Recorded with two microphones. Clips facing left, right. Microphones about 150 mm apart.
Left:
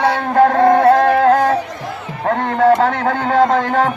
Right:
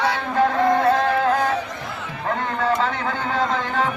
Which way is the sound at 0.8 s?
70° left (ahead or behind).